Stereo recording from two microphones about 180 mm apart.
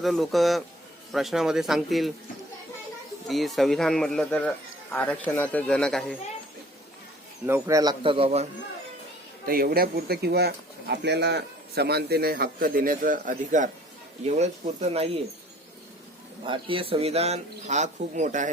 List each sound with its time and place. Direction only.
0.0 s speech: centre (ahead or behind)
3.2 s speech: centre (ahead or behind)
7.4 s a man's voice: 15° right (ahead or behind); by 8.4 s 35° right (ahead or behind)
9.5 s speech: 55° right (ahead or behind); by 15.2 s 35° right (ahead or behind)
16.5 s speech: 30° right (ahead or behind)